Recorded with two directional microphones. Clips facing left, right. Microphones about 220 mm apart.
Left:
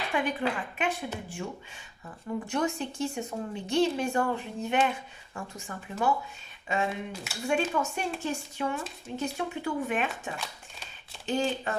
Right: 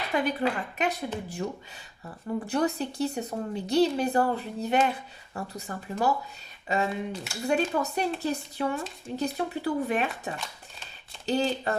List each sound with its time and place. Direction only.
0.1 s speech: 40° right (ahead or behind)